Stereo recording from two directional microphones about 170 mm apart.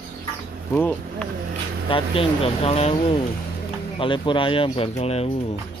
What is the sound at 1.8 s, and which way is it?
Speech, 30° left (ahead or behind).